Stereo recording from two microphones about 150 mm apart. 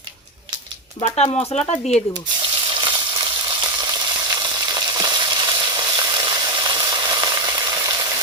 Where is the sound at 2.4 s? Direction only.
35° right (ahead or behind).